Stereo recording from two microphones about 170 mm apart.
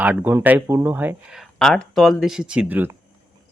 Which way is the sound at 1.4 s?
5° left (ahead or behind).